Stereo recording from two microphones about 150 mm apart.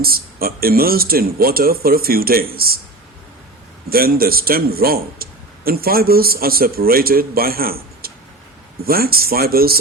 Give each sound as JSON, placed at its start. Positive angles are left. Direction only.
{"t": 0.0, "sound": "speech", "side_deg": -85}
{"t": 3.8, "sound": "speech", "side_deg": -85}